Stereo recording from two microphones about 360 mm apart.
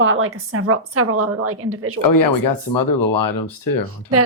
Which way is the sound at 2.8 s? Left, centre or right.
Left.